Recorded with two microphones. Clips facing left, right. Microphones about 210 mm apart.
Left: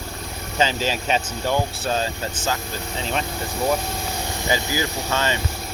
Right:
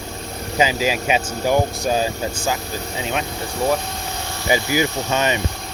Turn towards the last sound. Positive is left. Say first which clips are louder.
# right 3 dB
turn(degrees=-20)  # may be behind; listen again after turning